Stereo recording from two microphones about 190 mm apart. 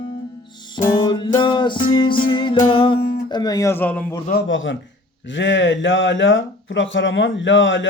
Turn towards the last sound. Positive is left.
turn(degrees=80)